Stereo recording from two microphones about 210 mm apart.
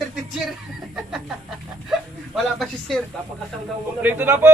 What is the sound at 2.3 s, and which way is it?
Speech, centre (ahead or behind).